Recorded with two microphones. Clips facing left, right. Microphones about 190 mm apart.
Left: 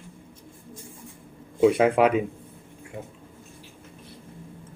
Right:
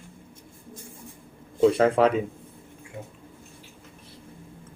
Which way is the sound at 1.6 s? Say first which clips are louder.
Even; 10° left (ahead or behind).